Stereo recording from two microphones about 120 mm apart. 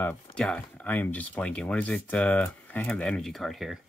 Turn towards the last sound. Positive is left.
turn(degrees=0)  # may be behind; listen again after turning